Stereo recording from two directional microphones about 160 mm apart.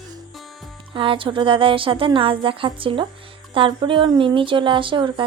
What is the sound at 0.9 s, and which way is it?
A woman's voice, 30° right (ahead or behind).